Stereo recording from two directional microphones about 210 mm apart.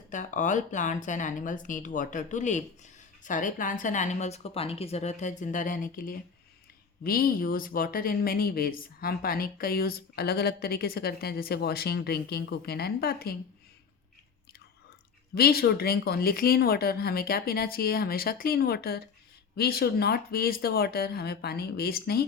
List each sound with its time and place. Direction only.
0.1 s a woman's voice: 35° left (ahead or behind)
15.4 s speech: 45° left (ahead or behind)